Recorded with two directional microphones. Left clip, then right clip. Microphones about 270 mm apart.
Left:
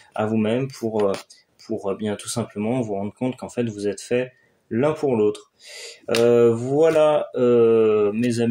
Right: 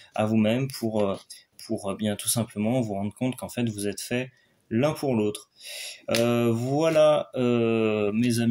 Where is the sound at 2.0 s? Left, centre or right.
Right.